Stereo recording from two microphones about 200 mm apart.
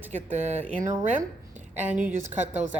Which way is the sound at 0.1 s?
35° right (ahead or behind).